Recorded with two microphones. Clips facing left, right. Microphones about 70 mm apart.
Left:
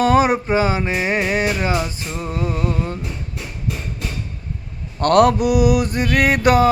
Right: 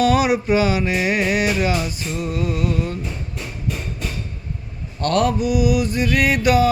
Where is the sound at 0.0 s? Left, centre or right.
Left.